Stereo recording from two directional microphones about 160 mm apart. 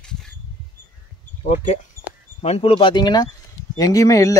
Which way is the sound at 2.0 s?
15° left (ahead or behind).